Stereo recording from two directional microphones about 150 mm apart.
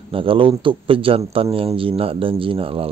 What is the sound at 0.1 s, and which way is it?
A man's voice, 35° right (ahead or behind).